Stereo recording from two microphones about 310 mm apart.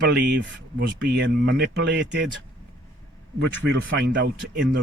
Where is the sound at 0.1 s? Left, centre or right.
Right.